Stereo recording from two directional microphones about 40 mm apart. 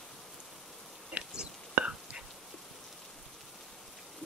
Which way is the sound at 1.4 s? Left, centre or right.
Right.